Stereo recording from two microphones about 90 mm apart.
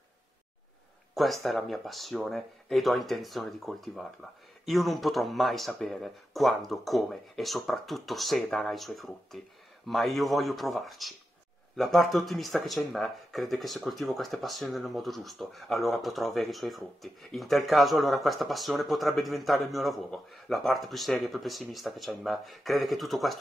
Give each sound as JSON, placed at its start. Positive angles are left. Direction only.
{"t": 1.1, "sound": "speech", "side_deg": 0}